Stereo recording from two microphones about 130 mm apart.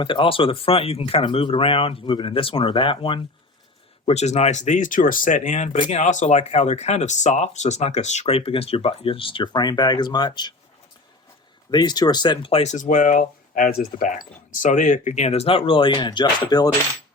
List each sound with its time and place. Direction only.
0.0 s speech: 40° left (ahead or behind)
4.0 s speech: 60° left (ahead or behind); by 10.5 s 35° left (ahead or behind)
11.7 s speech: 35° left (ahead or behind)
12.7 s speech: 85° left; by 16.6 s 30° left (ahead or behind)